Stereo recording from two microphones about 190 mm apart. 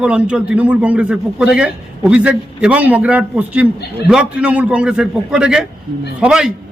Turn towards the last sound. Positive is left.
turn(degrees=-5)  # may be behind; listen again after turning